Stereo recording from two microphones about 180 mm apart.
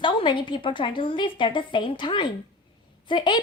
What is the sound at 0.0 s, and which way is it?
A woman's voice, 25° left (ahead or behind).